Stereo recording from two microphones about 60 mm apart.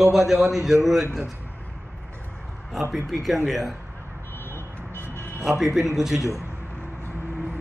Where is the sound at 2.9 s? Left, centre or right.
Centre.